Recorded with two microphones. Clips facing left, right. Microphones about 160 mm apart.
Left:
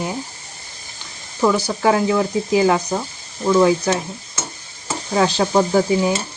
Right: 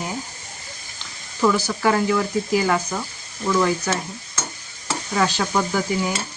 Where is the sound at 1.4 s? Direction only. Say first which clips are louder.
Left 2 dB; 20° left (ahead or behind).